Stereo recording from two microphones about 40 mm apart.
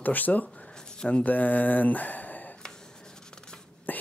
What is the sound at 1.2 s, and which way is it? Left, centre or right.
Speech, left.